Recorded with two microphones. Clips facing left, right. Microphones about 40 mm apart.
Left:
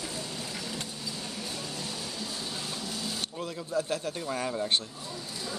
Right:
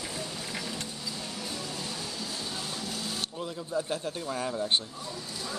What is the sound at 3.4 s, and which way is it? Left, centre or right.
Speech, centre.